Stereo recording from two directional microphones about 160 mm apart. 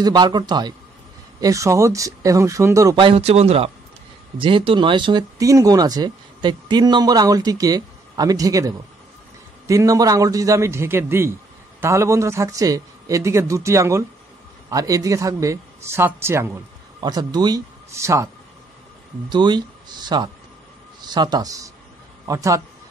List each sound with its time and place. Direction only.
0.0 s speech: 25° right (ahead or behind)
3.0 s a man's voice: 35° right (ahead or behind); by 16.5 s 15° right (ahead or behind)
17.0 s a man's voice: 25° right (ahead or behind)